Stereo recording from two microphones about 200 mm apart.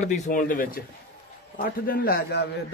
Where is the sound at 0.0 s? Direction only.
35° left (ahead or behind).